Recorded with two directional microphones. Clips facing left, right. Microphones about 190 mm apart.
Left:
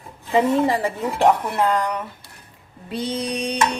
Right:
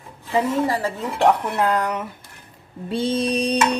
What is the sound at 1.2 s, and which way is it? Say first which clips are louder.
Speech: even; centre (ahead or behind).